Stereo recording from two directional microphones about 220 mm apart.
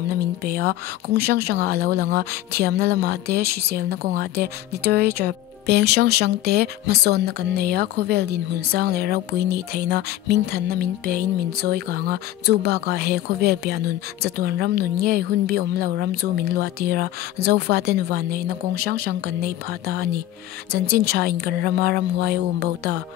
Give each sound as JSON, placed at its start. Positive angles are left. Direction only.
{"t": 0.1, "sound": "speech", "side_deg": -45}